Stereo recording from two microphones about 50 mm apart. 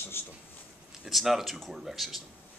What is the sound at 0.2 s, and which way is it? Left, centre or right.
Speech, left.